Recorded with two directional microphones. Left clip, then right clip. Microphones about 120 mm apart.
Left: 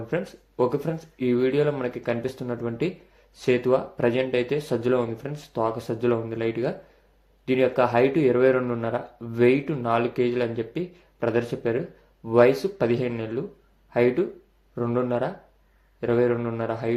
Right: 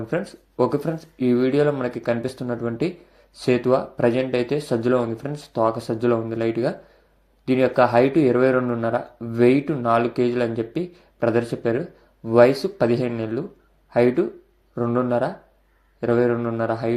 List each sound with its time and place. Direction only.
0.1 s speech: 25° right (ahead or behind)